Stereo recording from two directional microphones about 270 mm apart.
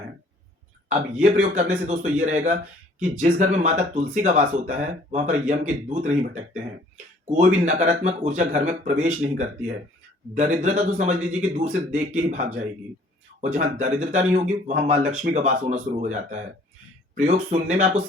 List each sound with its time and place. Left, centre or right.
0.9 s speech: right